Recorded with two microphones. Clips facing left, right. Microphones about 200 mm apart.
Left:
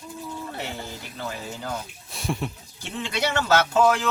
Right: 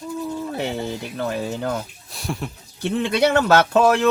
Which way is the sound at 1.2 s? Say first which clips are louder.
Right 8 dB; 60° right (ahead or behind).